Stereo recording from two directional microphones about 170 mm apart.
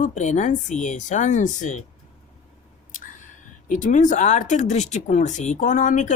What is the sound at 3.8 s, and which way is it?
Speech, 45° left (ahead or behind).